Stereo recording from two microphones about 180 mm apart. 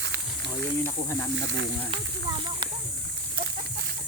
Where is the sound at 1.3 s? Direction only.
85° right.